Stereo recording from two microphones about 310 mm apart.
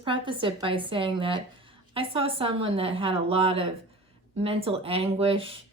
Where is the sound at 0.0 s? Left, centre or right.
Centre.